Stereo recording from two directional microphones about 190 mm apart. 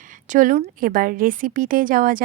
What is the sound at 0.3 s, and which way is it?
A woman's voice, 45° right (ahead or behind).